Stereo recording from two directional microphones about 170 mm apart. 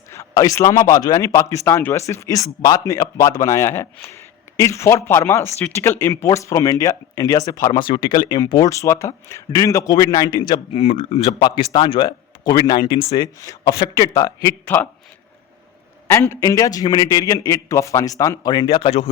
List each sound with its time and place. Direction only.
0.1 s speech: 20° left (ahead or behind); by 11.2 s 35° left (ahead or behind)
11.3 s speech: 25° left (ahead or behind)
13.2 s speech: 20° left (ahead or behind)
16.0 s speech: 15° left (ahead or behind); by 19.0 s 35° left (ahead or behind)